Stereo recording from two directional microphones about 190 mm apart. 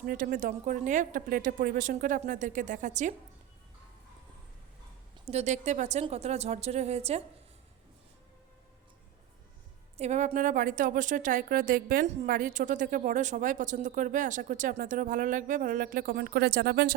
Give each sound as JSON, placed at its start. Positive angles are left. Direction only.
{"t": 0.0, "sound": "a woman's voice", "side_deg": -45}
{"t": 5.2, "sound": "a woman's voice", "side_deg": -35}
{"t": 10.0, "sound": "a woman's voice", "side_deg": -35}